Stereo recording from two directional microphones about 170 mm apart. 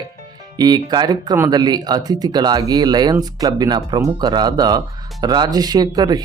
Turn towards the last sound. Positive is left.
turn(degrees=-25)  # may be behind; listen again after turning